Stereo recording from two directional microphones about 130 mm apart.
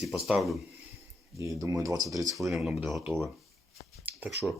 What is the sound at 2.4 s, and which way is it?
Speech, centre (ahead or behind).